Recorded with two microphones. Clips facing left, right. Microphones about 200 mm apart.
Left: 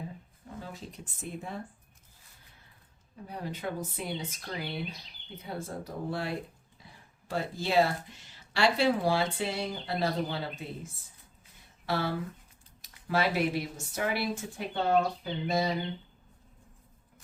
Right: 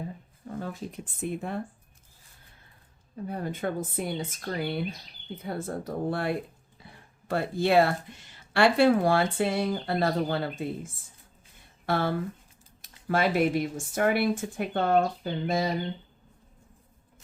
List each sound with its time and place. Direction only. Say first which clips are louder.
0.6 s speech: right 7 dB; 55° right (ahead or behind)
3.2 s speech: right 5 dB; 50° right (ahead or behind)